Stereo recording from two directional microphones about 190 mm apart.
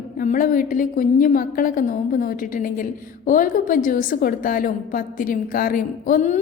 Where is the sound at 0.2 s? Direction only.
45° left (ahead or behind).